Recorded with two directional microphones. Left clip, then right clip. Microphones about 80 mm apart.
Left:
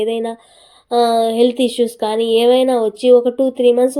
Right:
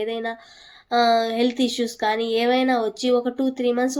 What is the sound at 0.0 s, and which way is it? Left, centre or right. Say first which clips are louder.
Speech: left 7 dB; left.